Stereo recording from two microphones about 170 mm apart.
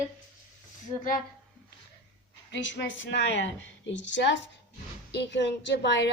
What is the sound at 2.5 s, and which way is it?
A woman's voice, 90° left.